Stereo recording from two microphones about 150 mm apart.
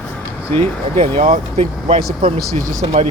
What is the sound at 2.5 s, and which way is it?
Speech, 55° right (ahead or behind).